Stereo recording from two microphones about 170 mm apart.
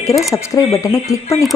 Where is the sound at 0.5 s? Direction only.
20° left (ahead or behind).